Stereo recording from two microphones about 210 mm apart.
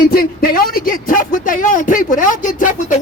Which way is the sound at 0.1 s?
45° left (ahead or behind).